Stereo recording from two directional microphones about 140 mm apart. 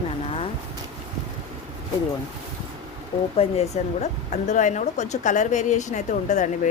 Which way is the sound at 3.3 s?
45° left (ahead or behind).